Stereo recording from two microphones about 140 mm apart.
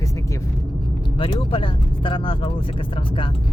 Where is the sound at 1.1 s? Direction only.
40° left (ahead or behind).